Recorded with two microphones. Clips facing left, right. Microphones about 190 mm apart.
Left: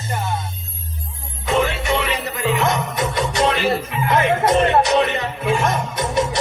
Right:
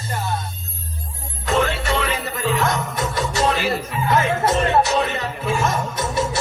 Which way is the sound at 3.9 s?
20° left (ahead or behind).